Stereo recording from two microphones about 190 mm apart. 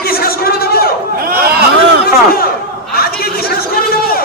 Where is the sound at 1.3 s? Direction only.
55° right (ahead or behind).